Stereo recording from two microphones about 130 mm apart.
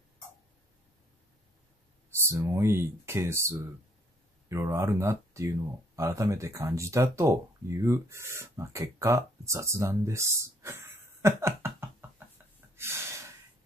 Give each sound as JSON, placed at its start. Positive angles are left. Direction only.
{"t": 2.0, "sound": "speech", "side_deg": -20}
{"t": 12.7, "sound": "snort", "side_deg": -20}